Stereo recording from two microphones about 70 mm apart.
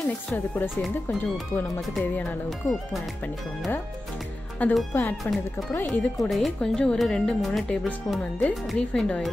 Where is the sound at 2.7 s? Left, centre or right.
Centre.